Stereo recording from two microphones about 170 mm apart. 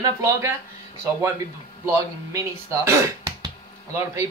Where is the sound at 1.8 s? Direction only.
15° right (ahead or behind).